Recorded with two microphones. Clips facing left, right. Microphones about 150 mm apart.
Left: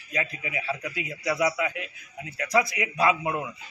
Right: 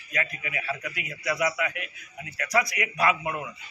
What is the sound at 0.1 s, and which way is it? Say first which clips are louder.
A man's voice: left 1 dB; 25° left (ahead or behind).